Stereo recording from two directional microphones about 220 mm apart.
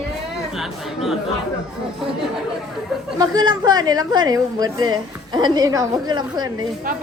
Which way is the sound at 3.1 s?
15° right (ahead or behind).